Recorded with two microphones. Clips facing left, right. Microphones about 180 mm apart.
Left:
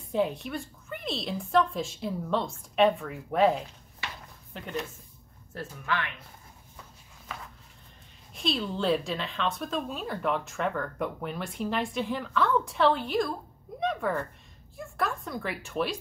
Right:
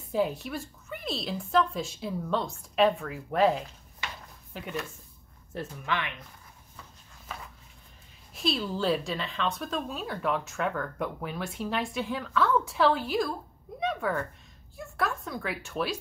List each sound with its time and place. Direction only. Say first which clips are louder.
0.1 s speech: even; centre (ahead or behind)
5.5 s speech: even; 20° right (ahead or behind)
8.4 s speech: even; 5° right (ahead or behind)